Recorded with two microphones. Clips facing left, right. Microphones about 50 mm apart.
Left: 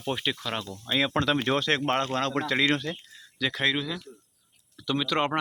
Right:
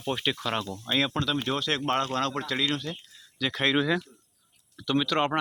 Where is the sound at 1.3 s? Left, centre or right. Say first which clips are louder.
Left 3 dB; left.